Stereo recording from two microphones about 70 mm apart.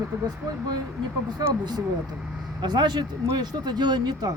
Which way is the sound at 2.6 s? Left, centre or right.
Right.